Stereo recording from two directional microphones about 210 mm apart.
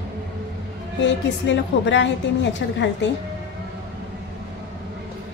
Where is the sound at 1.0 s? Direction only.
60° left (ahead or behind).